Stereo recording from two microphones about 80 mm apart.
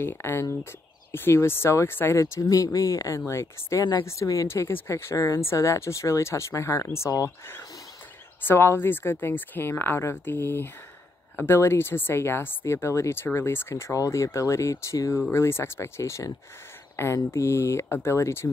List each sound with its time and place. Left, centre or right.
0.0 s speech: left
2.4 s speech: left